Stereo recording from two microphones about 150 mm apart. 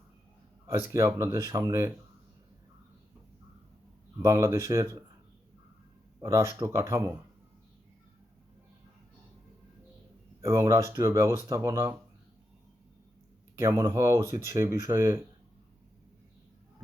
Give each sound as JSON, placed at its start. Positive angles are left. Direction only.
{"t": 0.7, "sound": "speech", "side_deg": -20}
{"t": 4.2, "sound": "speech", "side_deg": -20}
{"t": 6.1, "sound": "speech", "side_deg": -20}
{"t": 10.4, "sound": "speech", "side_deg": -20}
{"t": 13.6, "sound": "speech", "side_deg": -20}